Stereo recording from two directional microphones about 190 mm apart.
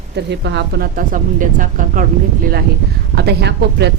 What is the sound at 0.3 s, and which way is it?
Speech, 65° right (ahead or behind).